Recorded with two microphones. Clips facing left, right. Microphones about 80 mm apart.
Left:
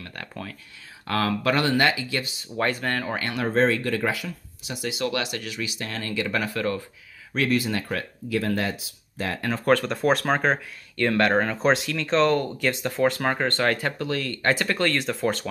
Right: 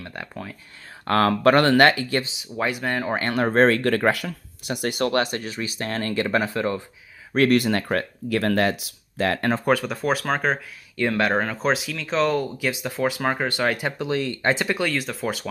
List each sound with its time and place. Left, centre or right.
0.0 s a sound: centre
1.0 s speech: right
2.5 s speech: centre
3.1 s speech: right
3.6 s speech: right
7.3 s speech: right
9.7 s speech: centre